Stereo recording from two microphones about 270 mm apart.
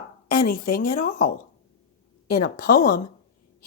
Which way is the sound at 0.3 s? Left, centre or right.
Left.